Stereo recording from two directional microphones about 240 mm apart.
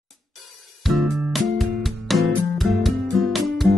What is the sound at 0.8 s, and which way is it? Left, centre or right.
Music, centre.